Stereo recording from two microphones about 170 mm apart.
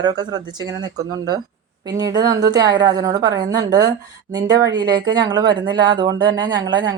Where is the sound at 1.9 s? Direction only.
25° right (ahead or behind).